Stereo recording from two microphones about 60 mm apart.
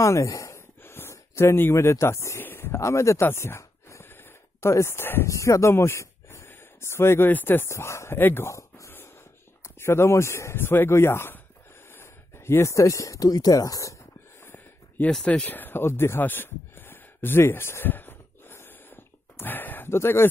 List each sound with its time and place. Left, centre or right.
0.0 s speech: left
0.8 s a sound: left
1.7 s speech: left
2.8 s speech: left
3.3 s gasp: left
5.2 s speech: left
6.5 s a sound: left
7.2 s speech: left
7.7 s speech: left
8.2 s speech: left
8.5 s a sound: left
9.6 s speech: left
15.2 s a sound: left
19.9 s speech: left